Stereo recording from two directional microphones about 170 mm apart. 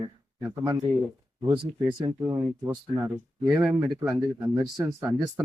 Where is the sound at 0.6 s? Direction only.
20° right (ahead or behind).